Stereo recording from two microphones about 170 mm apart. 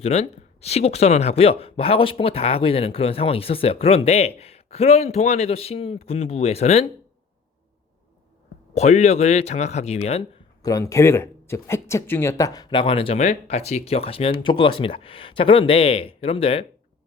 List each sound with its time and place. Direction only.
0.0 s speech: 40° left (ahead or behind)
8.7 s speech: 40° left (ahead or behind)
10.6 s speech: 20° left (ahead or behind); by 16.6 s 35° left (ahead or behind)